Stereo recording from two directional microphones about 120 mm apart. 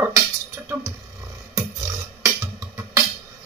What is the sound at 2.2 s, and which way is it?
Music, 25° right (ahead or behind).